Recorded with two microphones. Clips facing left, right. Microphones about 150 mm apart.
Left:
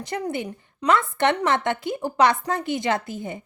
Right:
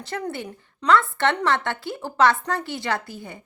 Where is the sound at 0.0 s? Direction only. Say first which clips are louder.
Left 2 dB; 15° left (ahead or behind).